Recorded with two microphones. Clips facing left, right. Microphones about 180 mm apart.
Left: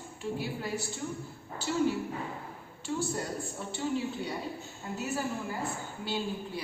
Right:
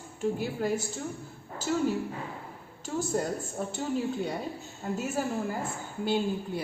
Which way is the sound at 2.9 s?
45° right (ahead or behind).